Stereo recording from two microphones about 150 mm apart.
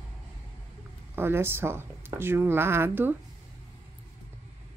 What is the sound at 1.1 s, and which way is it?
Speech, 15° right (ahead or behind).